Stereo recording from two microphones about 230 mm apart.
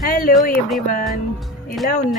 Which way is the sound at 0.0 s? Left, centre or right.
Left.